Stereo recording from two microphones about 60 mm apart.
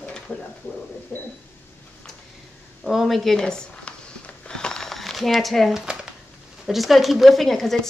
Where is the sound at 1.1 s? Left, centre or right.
Left.